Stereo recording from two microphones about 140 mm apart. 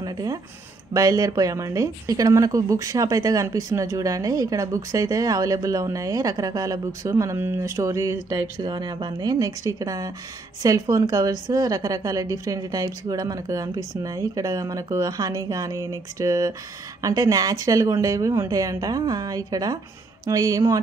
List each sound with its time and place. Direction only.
0.0 s speech: 30° right (ahead or behind)